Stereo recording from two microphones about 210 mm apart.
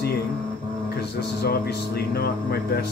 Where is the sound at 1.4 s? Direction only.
50° left (ahead or behind).